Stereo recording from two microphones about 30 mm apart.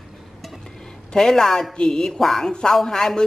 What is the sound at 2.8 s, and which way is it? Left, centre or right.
Speech, centre.